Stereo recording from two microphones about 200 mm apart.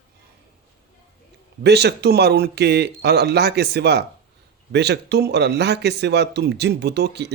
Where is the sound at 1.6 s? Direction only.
55° right (ahead or behind).